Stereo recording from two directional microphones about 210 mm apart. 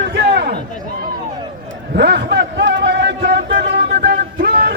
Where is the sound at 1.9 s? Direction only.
55° right (ahead or behind).